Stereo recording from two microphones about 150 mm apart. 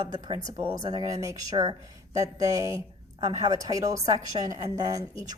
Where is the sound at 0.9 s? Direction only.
25° right (ahead or behind).